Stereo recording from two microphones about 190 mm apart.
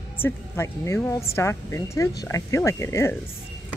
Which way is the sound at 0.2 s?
10° left (ahead or behind).